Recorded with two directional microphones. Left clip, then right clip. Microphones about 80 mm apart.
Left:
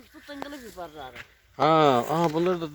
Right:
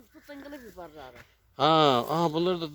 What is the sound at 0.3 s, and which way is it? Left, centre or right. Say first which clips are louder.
Speech: left 5 dB; centre.